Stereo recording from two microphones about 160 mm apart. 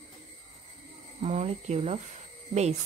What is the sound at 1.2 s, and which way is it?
Speech, 40° right (ahead or behind).